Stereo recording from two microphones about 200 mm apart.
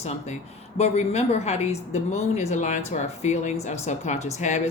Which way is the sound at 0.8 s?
30° left (ahead or behind).